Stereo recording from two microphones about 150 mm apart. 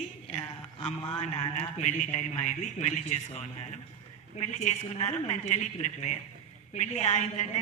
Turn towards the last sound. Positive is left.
turn(degrees=50)  # may be behind; listen again after turning